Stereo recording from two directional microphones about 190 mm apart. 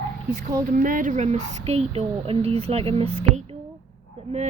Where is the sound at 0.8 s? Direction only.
45° right (ahead or behind).